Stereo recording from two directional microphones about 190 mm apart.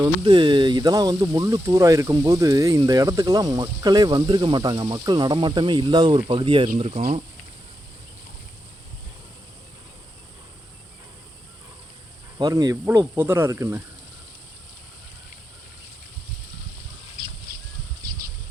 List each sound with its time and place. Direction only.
0.0 s speech: 25° right (ahead or behind)
12.4 s speech: 20° right (ahead or behind)